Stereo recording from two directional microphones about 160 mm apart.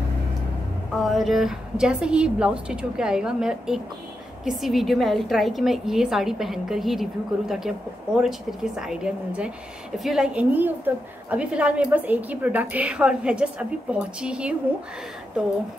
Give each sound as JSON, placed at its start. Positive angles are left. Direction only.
{"t": 0.9, "sound": "a woman's voice", "side_deg": 0}